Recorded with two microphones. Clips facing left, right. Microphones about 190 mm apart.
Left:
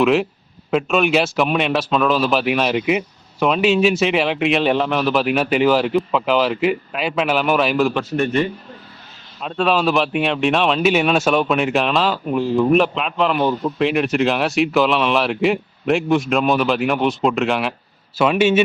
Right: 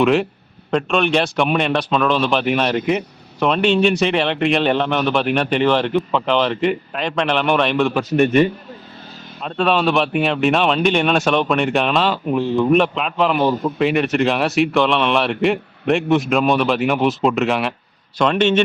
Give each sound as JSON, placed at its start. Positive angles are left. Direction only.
{"t": 0.0, "sound": "a man's voice", "side_deg": 0}
{"t": 8.1, "sound": "a man's voice", "side_deg": -15}
{"t": 9.4, "sound": "a man's voice", "side_deg": 0}